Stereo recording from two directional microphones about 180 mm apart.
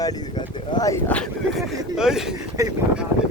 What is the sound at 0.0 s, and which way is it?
Speech, 20° left (ahead or behind).